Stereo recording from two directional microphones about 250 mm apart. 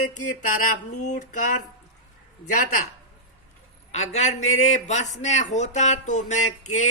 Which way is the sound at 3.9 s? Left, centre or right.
Left.